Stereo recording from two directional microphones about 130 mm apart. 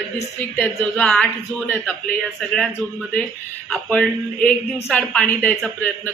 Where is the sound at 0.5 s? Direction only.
10° left (ahead or behind).